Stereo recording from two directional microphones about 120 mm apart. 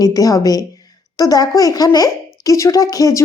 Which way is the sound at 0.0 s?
30° left (ahead or behind).